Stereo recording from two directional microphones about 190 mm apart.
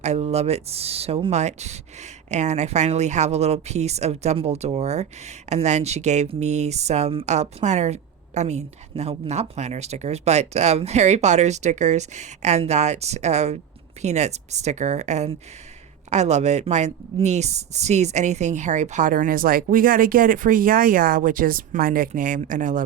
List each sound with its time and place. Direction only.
0.0 s a woman's voice: 35° right (ahead or behind)